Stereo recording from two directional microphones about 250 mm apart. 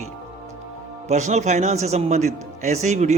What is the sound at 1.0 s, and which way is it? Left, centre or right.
Speech, right.